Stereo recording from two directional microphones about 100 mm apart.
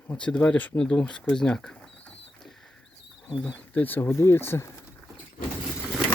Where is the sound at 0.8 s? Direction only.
10° left (ahead or behind).